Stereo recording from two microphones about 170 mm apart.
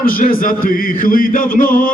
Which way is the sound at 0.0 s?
55° left (ahead or behind).